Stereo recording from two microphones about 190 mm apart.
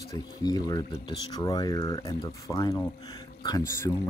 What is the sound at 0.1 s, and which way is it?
Speech, 20° left (ahead or behind).